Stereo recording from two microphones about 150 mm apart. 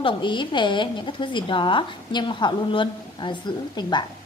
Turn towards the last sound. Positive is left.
turn(degrees=30)  # may be behind; listen again after turning